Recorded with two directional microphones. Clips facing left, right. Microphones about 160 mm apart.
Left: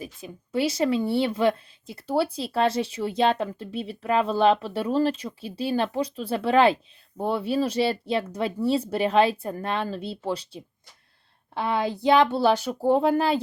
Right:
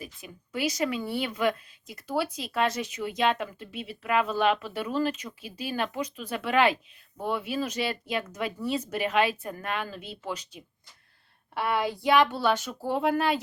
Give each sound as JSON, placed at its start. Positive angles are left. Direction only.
{"t": 0.0, "sound": "speech", "side_deg": 25}